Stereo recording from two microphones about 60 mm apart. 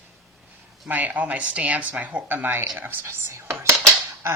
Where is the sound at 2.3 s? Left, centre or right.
Right.